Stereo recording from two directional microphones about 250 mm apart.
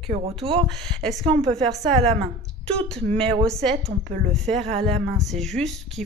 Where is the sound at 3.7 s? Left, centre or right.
Right.